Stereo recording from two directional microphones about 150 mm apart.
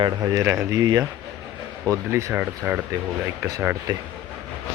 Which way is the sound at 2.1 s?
15° right (ahead or behind).